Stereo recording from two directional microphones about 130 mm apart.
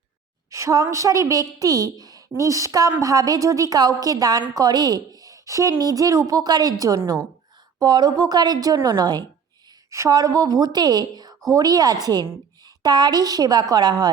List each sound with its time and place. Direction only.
0.5 s a woman's voice: 25° right (ahead or behind)